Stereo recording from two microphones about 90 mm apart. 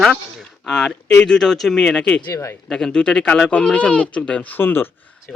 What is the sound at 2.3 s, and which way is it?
Speech, 35° left (ahead or behind).